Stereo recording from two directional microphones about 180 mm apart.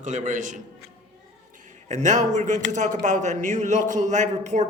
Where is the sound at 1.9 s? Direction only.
40° right (ahead or behind).